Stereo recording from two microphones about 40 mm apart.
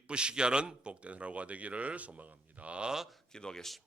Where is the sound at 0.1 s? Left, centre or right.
Right.